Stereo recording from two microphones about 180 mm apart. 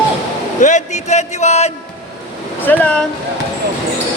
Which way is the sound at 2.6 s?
10° left (ahead or behind).